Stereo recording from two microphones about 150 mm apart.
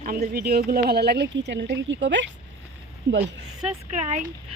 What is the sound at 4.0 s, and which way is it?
Speech, 50° right (ahead or behind).